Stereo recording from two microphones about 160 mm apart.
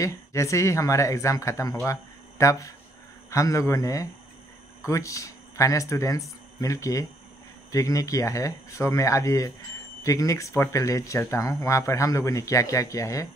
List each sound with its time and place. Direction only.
0.0 s speech: 20° left (ahead or behind)